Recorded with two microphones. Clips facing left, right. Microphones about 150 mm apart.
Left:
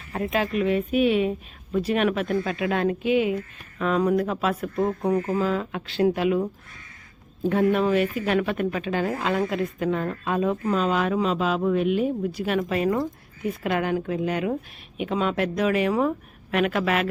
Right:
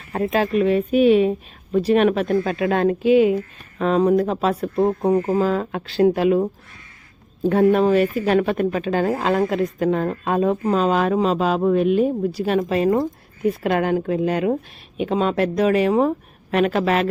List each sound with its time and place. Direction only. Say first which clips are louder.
0.1 s speech: right 5 dB; 35° right (ahead or behind)
7.5 s speech: right 5 dB; 40° right (ahead or behind)